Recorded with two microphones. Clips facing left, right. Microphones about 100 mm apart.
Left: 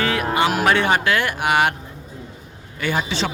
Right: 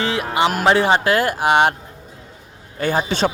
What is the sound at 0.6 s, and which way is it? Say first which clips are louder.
Speech: right 2 dB; 25° right (ahead or behind).